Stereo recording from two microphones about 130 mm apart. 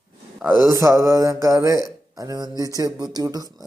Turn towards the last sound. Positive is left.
turn(degrees=-30)  # may be behind; listen again after turning